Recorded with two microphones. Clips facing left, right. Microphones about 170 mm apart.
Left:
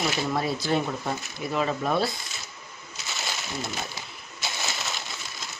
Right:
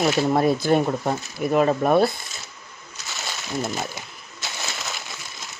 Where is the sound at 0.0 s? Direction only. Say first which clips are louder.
Right 8 dB; 50° right (ahead or behind).